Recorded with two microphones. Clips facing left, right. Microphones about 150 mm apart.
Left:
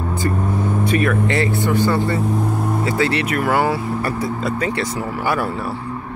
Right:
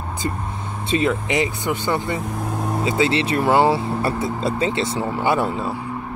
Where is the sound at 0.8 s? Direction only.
20° right (ahead or behind).